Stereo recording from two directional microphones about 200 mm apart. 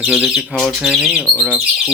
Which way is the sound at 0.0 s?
5° right (ahead or behind).